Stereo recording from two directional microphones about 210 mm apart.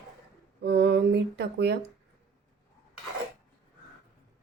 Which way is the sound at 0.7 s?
50° right (ahead or behind).